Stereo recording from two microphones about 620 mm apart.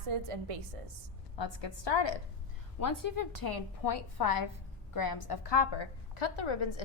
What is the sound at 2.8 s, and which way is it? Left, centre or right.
A woman's voice, left.